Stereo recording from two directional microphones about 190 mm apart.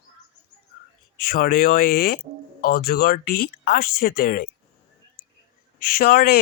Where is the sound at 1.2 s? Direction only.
50° left (ahead or behind).